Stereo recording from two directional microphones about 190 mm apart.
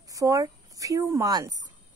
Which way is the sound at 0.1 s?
15° right (ahead or behind).